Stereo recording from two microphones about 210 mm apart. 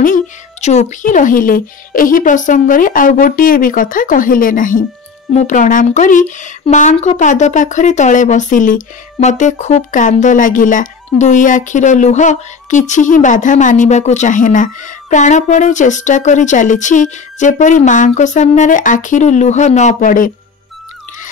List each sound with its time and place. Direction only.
0.0 s speech: 35° left (ahead or behind)